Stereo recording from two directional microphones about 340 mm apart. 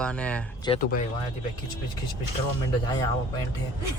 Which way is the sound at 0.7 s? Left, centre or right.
Left.